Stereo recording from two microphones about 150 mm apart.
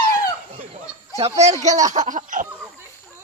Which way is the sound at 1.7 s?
55° right (ahead or behind).